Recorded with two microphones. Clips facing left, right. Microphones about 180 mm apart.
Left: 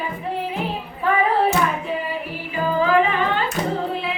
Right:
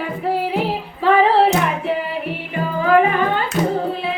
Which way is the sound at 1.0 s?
85° right.